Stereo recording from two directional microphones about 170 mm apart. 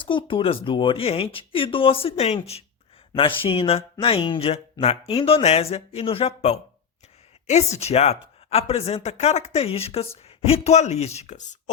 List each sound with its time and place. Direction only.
0.0 s speech: 30° left (ahead or behind)